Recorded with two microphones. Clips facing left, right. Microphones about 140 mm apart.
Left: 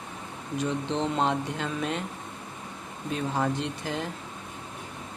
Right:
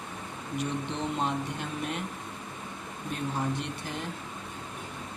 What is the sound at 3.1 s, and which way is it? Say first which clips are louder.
Speech: left 4 dB; 90° left.